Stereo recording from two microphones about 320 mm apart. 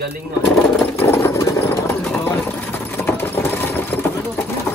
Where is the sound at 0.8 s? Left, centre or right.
Centre.